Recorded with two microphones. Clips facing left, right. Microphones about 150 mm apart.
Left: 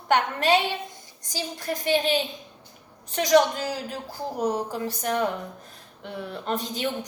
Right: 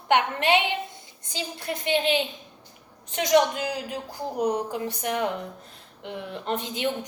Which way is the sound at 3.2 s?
20° right (ahead or behind).